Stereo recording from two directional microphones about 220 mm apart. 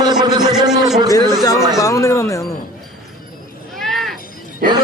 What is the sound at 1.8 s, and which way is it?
Speech, 15° left (ahead or behind).